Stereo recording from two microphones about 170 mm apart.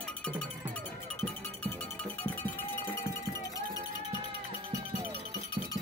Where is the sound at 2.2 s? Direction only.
10° left (ahead or behind).